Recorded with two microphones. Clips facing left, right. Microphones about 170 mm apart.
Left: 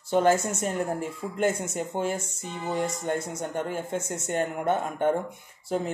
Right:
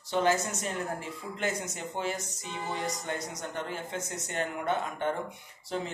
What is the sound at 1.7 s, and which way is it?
Speech, 50° left (ahead or behind).